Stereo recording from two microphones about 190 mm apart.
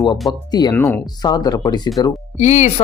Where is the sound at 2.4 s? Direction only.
40° left (ahead or behind).